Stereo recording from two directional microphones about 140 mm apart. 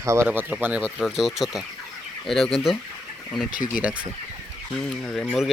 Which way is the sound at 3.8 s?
10° right (ahead or behind).